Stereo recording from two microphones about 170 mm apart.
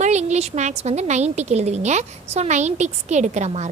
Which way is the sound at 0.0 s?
40° right (ahead or behind).